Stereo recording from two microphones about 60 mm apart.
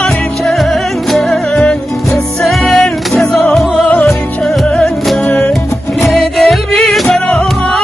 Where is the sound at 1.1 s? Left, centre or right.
Centre.